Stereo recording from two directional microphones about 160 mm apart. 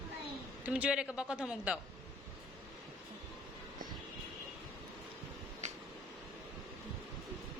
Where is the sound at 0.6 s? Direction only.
5° right (ahead or behind).